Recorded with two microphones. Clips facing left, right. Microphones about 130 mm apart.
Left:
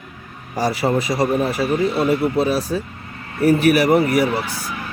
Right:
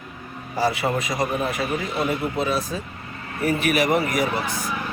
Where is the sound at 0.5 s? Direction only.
35° left (ahead or behind).